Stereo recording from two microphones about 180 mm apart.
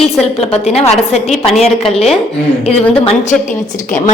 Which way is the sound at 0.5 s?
35° left (ahead or behind).